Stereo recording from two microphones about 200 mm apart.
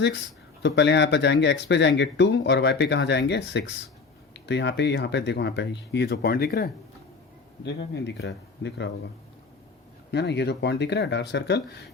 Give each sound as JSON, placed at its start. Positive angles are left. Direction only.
{"t": 0.6, "sound": "speech", "side_deg": 60}
{"t": 10.1, "sound": "speech", "side_deg": 55}